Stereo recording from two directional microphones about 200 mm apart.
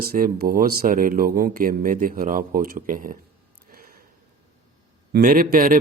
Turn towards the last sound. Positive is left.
turn(degrees=-45)  # may be behind; listen again after turning